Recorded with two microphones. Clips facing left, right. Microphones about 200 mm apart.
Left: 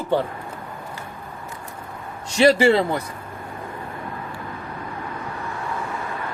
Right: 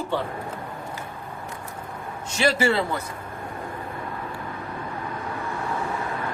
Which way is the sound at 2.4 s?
30° left (ahead or behind).